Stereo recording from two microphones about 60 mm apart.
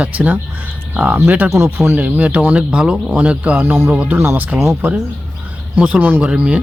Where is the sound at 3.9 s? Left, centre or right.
Right.